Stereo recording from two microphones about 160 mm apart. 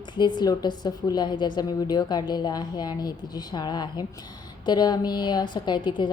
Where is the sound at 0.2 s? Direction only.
25° left (ahead or behind).